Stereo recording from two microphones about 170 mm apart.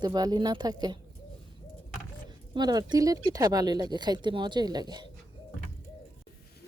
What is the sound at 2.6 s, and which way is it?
Speech, 25° right (ahead or behind).